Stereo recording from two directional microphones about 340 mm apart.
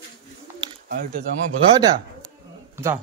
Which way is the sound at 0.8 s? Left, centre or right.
Right.